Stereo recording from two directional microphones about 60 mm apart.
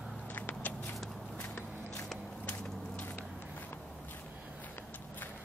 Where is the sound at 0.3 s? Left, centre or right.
Left.